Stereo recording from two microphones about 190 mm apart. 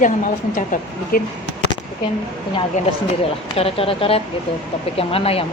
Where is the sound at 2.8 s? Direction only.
40° left (ahead or behind).